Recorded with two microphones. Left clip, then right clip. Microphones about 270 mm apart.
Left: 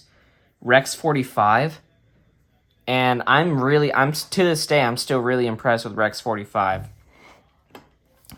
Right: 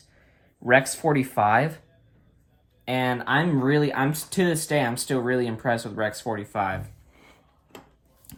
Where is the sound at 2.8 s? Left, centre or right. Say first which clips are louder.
Left 6 dB; centre.